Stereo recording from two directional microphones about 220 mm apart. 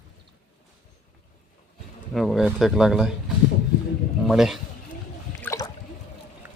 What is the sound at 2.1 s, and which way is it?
Speech, centre (ahead or behind).